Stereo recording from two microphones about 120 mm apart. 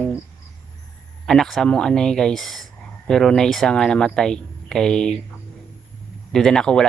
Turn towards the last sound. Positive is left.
turn(degrees=5)  # may be behind; listen again after turning